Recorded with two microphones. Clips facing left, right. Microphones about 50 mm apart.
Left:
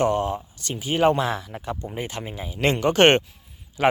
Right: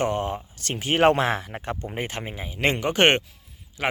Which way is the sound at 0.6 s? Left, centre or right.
Right.